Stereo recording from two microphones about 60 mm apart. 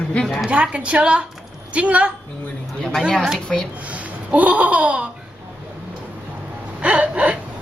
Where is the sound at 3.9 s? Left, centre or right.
Right.